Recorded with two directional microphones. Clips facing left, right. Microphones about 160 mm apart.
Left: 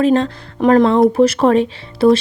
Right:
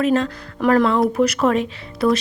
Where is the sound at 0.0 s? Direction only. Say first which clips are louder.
Left 4 dB; 30° left (ahead or behind).